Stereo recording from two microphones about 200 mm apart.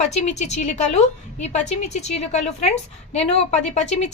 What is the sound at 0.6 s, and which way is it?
A woman's voice, 35° left (ahead or behind).